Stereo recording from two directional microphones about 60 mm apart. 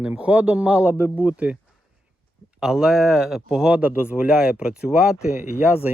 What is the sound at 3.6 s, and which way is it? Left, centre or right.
Speech, right.